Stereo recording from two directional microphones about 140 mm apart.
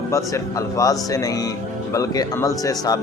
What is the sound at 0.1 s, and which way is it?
Speech, 25° left (ahead or behind).